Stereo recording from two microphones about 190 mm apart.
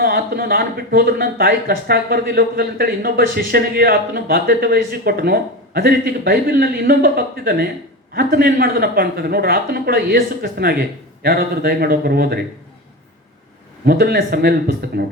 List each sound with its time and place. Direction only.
0.0 s speech: 50° right (ahead or behind)
13.8 s speech: 55° right (ahead or behind)